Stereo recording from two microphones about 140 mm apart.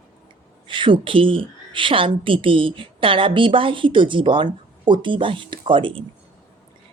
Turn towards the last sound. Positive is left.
turn(degrees=-35)  # may be behind; listen again after turning